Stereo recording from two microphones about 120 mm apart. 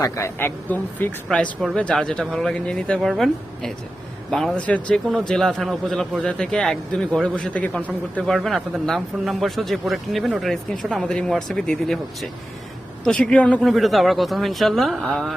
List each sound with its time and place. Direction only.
0.0 s a man's voice: 20° left (ahead or behind)
8.4 s a man's voice: centre (ahead or behind)
13.7 s a man's voice: centre (ahead or behind)